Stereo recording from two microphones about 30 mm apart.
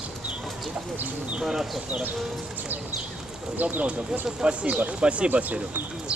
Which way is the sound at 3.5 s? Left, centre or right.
Right.